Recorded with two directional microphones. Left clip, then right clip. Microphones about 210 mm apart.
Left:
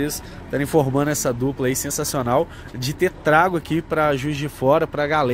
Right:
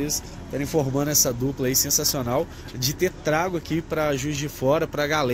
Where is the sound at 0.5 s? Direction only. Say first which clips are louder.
Left 6 dB; 25° left (ahead or behind).